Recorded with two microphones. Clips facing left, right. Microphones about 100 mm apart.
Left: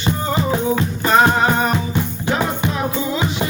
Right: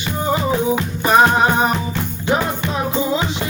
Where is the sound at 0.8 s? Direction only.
15° right (ahead or behind).